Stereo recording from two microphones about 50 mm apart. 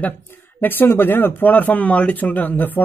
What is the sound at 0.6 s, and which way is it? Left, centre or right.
A man's voice, left.